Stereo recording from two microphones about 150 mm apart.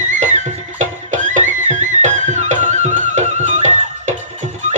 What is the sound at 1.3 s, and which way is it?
Music, 55° right (ahead or behind).